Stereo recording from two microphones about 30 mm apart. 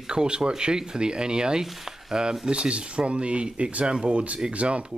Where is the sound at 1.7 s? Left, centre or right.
Centre.